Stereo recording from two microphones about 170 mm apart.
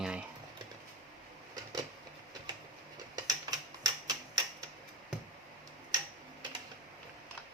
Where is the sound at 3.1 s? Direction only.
20° right (ahead or behind).